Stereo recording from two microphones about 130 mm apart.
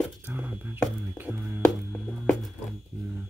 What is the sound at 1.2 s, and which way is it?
Music, 15° right (ahead or behind).